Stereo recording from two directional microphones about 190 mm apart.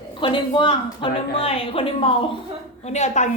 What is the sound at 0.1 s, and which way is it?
A woman's voice, 25° left (ahead or behind).